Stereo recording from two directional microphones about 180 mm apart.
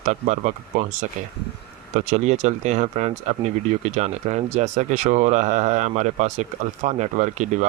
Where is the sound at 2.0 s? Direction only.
40° right (ahead or behind).